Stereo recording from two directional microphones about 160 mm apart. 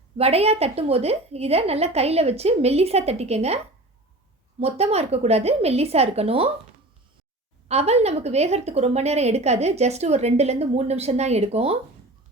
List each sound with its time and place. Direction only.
0.2 s a woman's voice: 40° right (ahead or behind)
4.6 s a woman's voice: 40° right (ahead or behind)
7.7 s a woman's voice: 40° right (ahead or behind)